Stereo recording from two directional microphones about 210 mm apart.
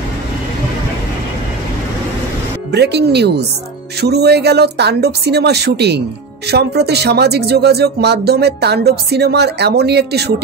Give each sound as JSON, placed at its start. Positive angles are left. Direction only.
{"t": 2.7, "sound": "speech", "side_deg": -50}